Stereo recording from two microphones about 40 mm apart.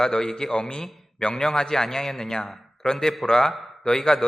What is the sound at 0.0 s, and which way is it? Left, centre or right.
A man's voice, centre.